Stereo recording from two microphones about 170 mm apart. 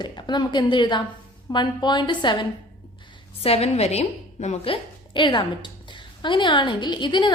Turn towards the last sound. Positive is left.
turn(degrees=25)  # may be behind; listen again after turning